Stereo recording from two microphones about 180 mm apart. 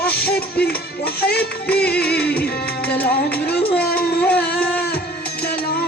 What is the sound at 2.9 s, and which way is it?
Music, 5° left (ahead or behind).